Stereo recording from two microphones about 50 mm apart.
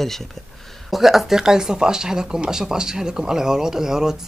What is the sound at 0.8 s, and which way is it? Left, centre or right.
Speech, centre.